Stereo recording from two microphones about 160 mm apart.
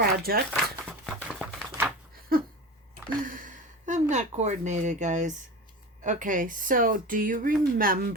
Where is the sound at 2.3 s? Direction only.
65° right (ahead or behind).